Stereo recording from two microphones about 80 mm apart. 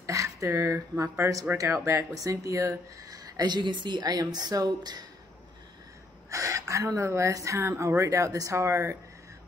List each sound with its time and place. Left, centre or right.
0.0 s speech: right
6.3 s speech: right